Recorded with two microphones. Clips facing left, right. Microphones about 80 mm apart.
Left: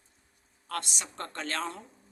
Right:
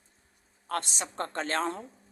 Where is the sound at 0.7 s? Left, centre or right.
Right.